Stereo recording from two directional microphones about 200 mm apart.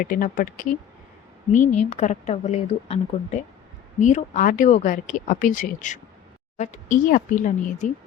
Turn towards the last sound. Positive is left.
turn(degrees=40)  # may be behind; listen again after turning